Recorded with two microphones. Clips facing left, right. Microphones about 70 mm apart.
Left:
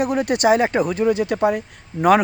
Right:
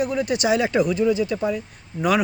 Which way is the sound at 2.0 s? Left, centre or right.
Left.